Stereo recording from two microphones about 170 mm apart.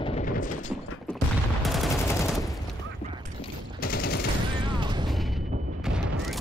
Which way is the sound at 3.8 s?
60° left (ahead or behind).